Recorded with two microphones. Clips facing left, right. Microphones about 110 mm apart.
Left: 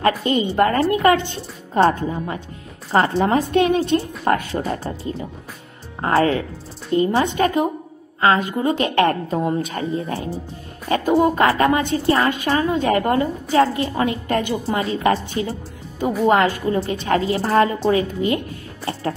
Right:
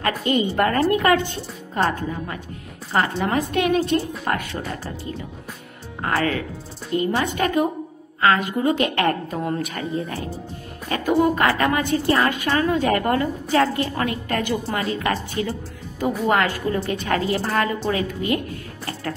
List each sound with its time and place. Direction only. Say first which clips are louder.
0.2 s a woman's voice: left 2 dB; 30° left (ahead or behind)